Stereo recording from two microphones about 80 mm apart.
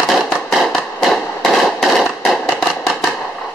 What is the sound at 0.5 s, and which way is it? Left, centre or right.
Fireworks, centre.